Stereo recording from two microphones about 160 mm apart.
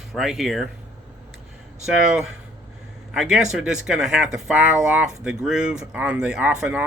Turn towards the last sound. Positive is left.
turn(degrees=-5)  # may be behind; listen again after turning